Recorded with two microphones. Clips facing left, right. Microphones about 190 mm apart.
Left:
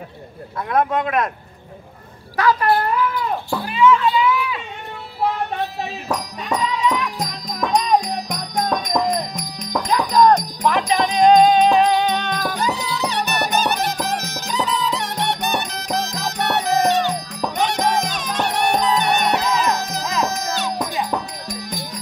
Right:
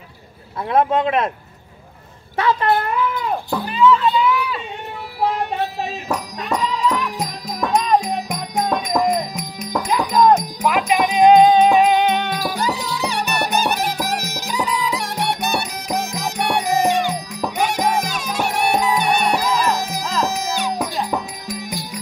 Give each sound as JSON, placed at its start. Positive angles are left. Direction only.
{"t": 0.7, "sound": "speech", "side_deg": -25}
{"t": 2.3, "sound": "speech", "side_deg": -25}
{"t": 3.6, "sound": "music", "side_deg": 0}
{"t": 6.9, "sound": "music", "side_deg": -5}